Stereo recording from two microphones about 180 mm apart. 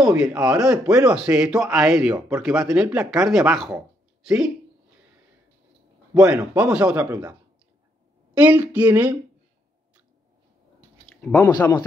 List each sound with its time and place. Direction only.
0.0 s a man's voice: 5° right (ahead or behind)
2.1 s speech: 15° right (ahead or behind)
2.6 s a man's voice: 5° right (ahead or behind)
6.2 s a man's voice: 5° right (ahead or behind)
8.4 s speech: 10° right (ahead or behind)
11.1 s a sound: 10° left (ahead or behind)
11.4 s speech: 20° left (ahead or behind)